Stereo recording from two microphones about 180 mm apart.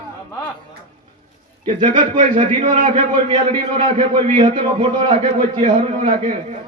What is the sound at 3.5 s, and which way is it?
A man's voice, 30° right (ahead or behind).